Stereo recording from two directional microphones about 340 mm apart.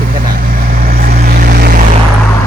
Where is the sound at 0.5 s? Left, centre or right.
Right.